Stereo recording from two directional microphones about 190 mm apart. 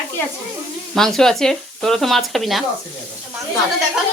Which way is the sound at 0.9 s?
Centre (ahead or behind).